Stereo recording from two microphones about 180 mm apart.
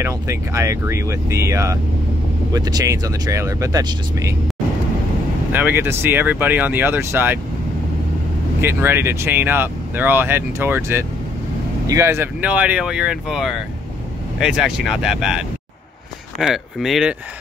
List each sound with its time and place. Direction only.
0.0 s speech: 15° right (ahead or behind)
5.5 s speech: 10° right (ahead or behind)
8.5 s speech: 10° right (ahead or behind)